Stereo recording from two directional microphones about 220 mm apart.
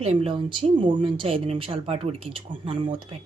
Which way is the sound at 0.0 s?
25° right (ahead or behind).